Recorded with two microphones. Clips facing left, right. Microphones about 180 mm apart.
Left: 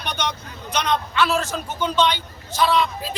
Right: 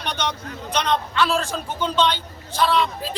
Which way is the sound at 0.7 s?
10° left (ahead or behind).